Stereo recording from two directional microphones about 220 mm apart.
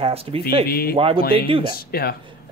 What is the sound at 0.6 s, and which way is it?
Speech, 45° left (ahead or behind).